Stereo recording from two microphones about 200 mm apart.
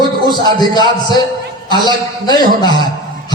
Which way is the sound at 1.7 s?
20° left (ahead or behind).